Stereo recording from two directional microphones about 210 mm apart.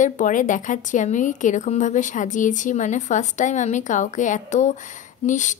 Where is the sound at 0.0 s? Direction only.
40° left (ahead or behind).